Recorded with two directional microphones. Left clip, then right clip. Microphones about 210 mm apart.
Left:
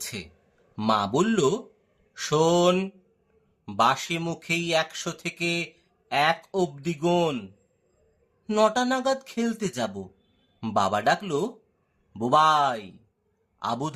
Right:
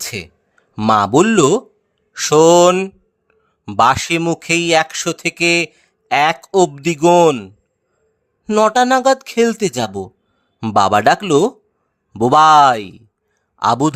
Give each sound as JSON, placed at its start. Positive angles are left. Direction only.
{"t": 0.0, "sound": "speech", "side_deg": -45}